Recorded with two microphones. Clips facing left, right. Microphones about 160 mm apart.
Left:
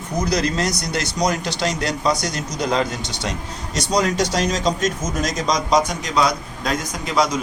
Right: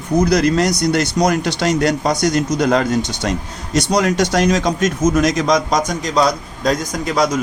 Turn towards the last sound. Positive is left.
turn(degrees=-40)  # may be behind; listen again after turning